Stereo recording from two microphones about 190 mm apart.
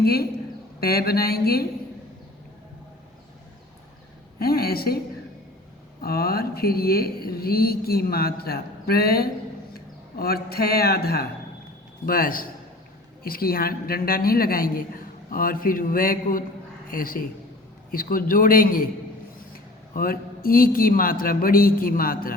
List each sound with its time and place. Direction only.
0.0 s a man's voice: 55° left (ahead or behind)
4.4 s speech: 55° left (ahead or behind)
6.0 s a man's voice: 55° left (ahead or behind)